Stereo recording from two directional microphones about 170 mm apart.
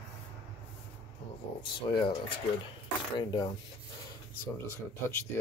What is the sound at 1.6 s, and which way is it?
Speech, 30° left (ahead or behind).